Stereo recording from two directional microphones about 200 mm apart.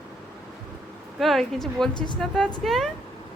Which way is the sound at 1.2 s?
Centre (ahead or behind).